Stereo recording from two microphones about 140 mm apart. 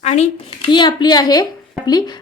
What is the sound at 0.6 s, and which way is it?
A woman's voice, 30° left (ahead or behind).